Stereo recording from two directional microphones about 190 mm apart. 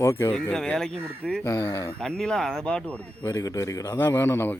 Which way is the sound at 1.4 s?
20° left (ahead or behind).